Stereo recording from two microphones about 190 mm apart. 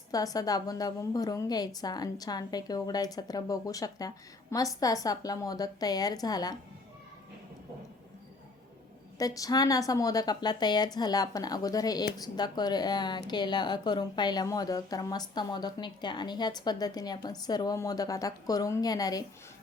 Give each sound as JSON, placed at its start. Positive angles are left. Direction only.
{"t": 0.1, "sound": "a woman's voice", "side_deg": 20}
{"t": 9.1, "sound": "a woman's voice", "side_deg": 20}